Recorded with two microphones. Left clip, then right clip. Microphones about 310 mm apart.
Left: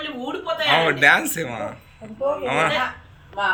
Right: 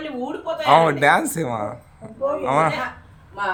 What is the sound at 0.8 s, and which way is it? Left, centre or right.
Speech, centre.